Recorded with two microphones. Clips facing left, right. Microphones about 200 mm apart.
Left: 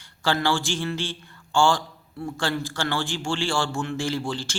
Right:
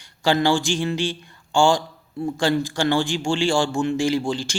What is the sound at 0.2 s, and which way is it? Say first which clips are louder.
Speech: right 5 dB; 15° right (ahead or behind).